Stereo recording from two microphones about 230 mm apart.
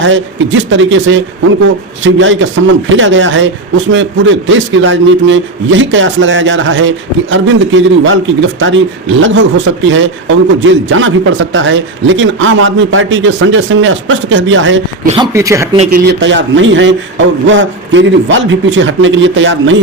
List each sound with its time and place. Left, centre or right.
0.0 s a man's voice: right
15.1 s speech: centre
15.9 s a man's voice: right